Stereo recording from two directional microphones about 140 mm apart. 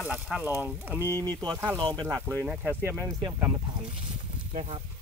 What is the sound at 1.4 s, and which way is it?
Speech, 30° right (ahead or behind).